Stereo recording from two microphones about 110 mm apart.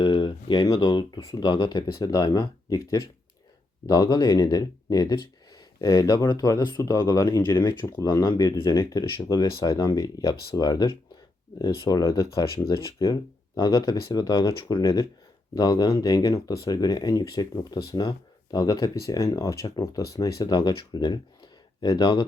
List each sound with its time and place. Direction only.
0.0 s a sound: 50° left (ahead or behind)
0.6 s speech: 40° left (ahead or behind)
8.0 s speech: 45° left (ahead or behind)